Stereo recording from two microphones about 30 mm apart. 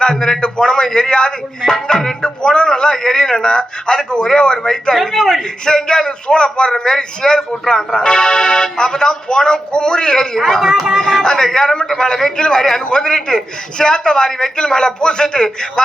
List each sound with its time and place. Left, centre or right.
0.0 s speech: left
5.1 s a man's voice: centre
5.6 s speech: left
10.4 s speech: centre
10.9 s speech: centre